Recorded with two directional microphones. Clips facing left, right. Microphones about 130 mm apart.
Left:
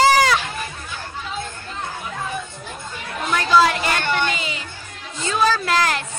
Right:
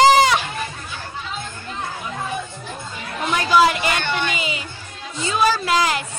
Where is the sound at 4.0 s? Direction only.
40° left (ahead or behind).